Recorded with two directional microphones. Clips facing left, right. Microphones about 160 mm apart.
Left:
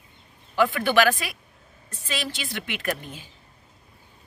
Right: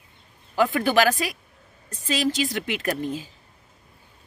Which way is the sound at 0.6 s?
40° right (ahead or behind).